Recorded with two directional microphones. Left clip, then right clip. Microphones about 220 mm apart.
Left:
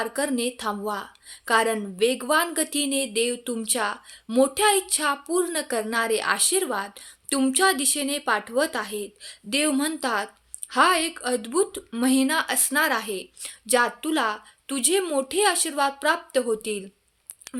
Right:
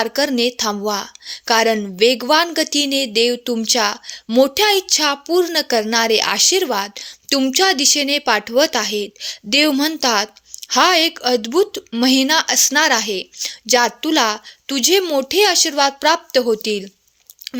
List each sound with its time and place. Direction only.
0.0 s a woman's voice: 30° right (ahead or behind)